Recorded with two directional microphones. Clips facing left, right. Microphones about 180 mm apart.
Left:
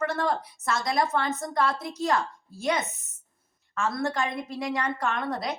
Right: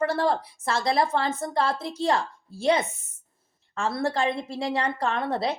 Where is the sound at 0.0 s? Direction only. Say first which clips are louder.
Right 3 dB; 30° right (ahead or behind).